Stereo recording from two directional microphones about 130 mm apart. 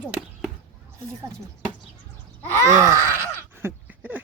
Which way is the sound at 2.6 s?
25° right (ahead or behind).